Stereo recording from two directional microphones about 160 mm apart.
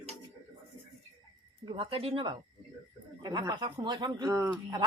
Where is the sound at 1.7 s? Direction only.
35° right (ahead or behind).